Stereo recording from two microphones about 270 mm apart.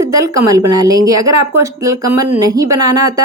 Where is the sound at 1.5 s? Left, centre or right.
Centre.